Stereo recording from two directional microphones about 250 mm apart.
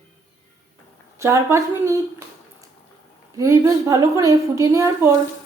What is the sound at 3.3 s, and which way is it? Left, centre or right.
A woman's voice, centre.